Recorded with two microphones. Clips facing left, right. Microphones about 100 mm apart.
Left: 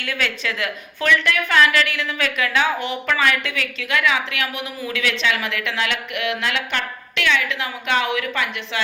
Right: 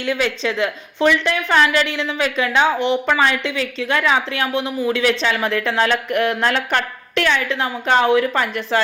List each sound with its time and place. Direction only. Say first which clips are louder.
0.0 s a woman's voice: right 5 dB; 25° right (ahead or behind); by 8.8 s 40° right (ahead or behind)